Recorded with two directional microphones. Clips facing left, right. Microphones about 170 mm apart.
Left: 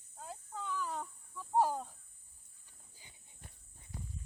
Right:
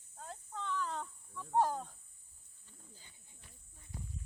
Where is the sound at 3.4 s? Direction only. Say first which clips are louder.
Left 5 dB; 50° left (ahead or behind).